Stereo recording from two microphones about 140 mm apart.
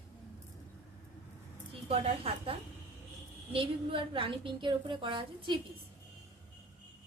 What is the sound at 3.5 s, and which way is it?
A woman's voice, 40° right (ahead or behind).